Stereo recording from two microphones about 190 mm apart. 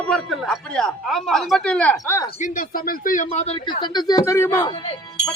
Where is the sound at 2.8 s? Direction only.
45° left (ahead or behind).